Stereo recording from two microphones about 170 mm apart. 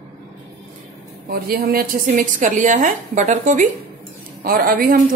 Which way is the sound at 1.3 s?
60° right (ahead or behind).